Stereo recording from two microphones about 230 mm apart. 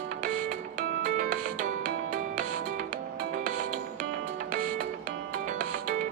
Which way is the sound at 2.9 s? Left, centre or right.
Right.